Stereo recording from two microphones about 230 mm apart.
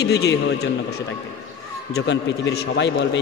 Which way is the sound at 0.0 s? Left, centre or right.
Left.